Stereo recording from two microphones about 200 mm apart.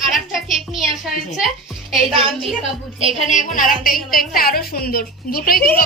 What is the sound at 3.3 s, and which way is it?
A woman's voice, 40° left (ahead or behind).